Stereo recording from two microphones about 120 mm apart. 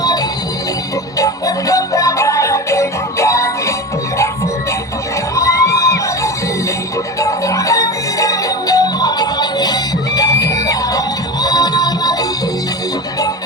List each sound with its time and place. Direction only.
0.0 s music: 30° left (ahead or behind)
5.3 s music: 25° left (ahead or behind)